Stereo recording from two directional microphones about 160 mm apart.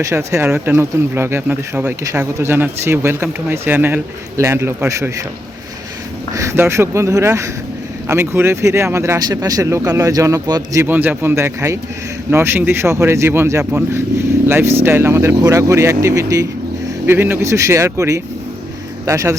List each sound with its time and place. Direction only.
0.0 s speech: 15° right (ahead or behind)
6.3 s speech: 20° right (ahead or behind)